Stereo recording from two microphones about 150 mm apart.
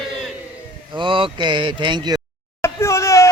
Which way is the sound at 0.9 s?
35° right (ahead or behind).